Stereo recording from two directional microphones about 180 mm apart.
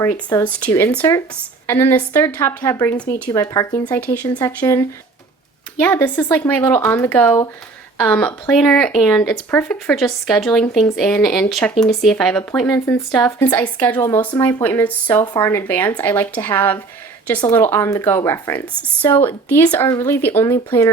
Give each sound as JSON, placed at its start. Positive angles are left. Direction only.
{"t": 0.0, "sound": "speech", "side_deg": 15}
{"t": 5.8, "sound": "speech", "side_deg": 10}
{"t": 19.9, "sound": "speech", "side_deg": 20}